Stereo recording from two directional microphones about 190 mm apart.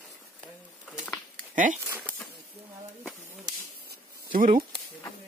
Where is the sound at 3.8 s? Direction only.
45° right (ahead or behind).